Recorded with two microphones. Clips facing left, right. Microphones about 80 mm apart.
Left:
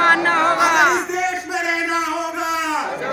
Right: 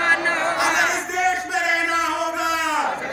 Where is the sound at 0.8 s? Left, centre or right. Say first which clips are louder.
Left 6 dB; left.